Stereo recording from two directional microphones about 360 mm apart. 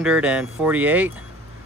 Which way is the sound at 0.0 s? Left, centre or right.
Centre.